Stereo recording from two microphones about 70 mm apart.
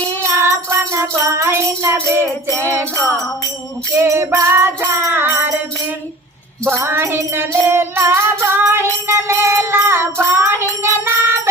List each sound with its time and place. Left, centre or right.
0.3 s jingle bell: right
2.7 s music: right
5.1 s music: right
6.7 s music: right
10.8 s jingle bell: right